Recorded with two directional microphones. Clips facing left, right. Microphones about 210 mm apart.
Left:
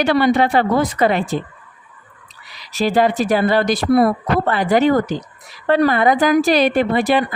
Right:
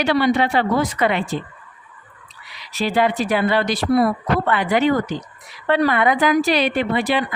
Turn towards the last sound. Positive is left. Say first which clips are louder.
# left 4 dB
turn(degrees=45)  # may be behind; listen again after turning